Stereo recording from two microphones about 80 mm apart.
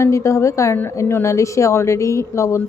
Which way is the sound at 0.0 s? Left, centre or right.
Left.